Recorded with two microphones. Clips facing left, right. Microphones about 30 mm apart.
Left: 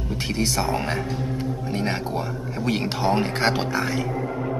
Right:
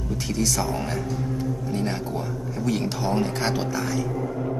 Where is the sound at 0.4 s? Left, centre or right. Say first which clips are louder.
Left 2 dB; left.